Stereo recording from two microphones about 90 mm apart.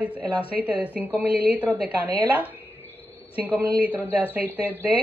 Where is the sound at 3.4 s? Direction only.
20° right (ahead or behind).